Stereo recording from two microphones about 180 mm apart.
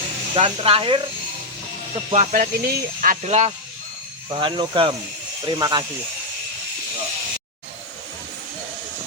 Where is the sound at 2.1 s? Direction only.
40° right (ahead or behind); by 5.9 s 25° right (ahead or behind).